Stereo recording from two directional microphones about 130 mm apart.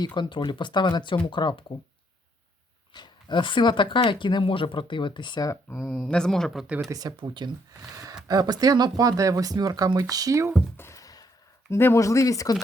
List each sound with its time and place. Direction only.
0.0 s speech: 35° left (ahead or behind)
2.9 s speech: 35° left (ahead or behind)
5.7 s speech: 5° left (ahead or behind)
6.9 s speech: 35° right (ahead or behind)
10.8 s a sound: 25° left (ahead or behind)
11.7 s speech: 20° left (ahead or behind)